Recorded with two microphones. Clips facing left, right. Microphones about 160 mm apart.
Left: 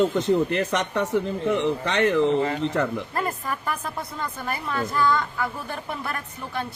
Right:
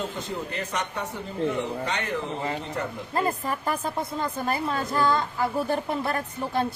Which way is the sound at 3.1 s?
25° right (ahead or behind).